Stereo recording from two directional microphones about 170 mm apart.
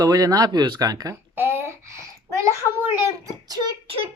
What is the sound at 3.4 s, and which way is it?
Speech, 25° right (ahead or behind).